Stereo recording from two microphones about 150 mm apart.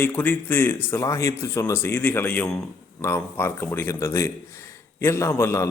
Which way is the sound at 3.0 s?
15° left (ahead or behind).